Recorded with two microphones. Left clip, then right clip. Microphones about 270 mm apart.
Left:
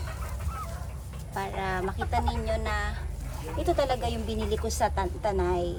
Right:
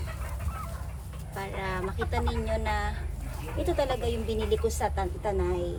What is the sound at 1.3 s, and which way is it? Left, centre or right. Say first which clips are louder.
A woman's voice: left 3 dB; centre.